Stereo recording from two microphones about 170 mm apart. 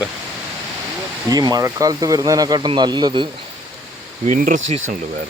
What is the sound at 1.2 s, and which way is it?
Speech, 25° right (ahead or behind).